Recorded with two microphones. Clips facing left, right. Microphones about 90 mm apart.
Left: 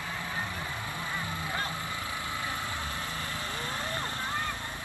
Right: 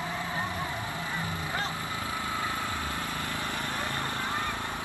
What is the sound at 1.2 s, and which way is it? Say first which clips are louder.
Vehicle: right 1 dB; 25° right (ahead or behind).